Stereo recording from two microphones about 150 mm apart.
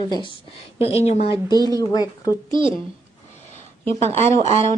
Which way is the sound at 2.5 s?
35° right (ahead or behind).